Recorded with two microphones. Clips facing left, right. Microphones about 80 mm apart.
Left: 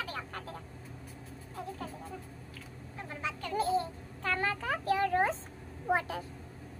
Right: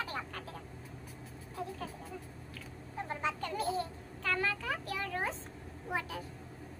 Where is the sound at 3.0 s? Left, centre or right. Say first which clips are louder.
Right 2 dB; right.